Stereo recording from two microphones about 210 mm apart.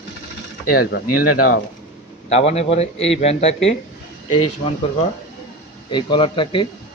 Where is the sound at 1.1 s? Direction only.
90° left.